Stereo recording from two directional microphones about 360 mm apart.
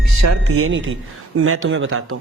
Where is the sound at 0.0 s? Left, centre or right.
Right.